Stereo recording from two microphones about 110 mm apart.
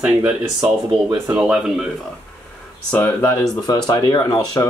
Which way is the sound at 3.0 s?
25° left (ahead or behind).